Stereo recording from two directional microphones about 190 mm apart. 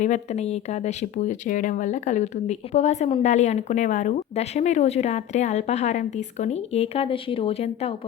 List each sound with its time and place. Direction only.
0.0 s speech: 35° left (ahead or behind)